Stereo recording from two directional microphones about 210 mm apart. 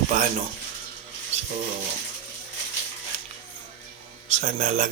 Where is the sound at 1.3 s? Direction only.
30° right (ahead or behind).